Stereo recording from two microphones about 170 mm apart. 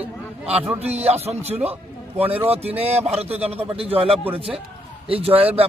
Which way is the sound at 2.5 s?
35° right (ahead or behind).